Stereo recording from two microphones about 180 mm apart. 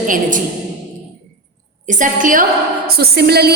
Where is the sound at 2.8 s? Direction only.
60° right (ahead or behind).